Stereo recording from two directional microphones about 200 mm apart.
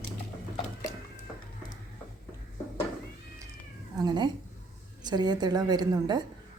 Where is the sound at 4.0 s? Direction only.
20° right (ahead or behind).